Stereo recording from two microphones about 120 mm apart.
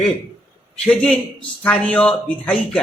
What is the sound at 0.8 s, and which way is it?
A man's voice, 5° left (ahead or behind).